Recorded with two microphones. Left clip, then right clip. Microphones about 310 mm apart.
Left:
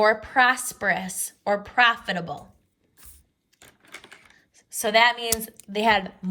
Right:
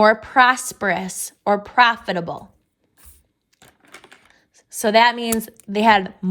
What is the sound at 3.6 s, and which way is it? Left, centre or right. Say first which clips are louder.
Typewriter: even; centre.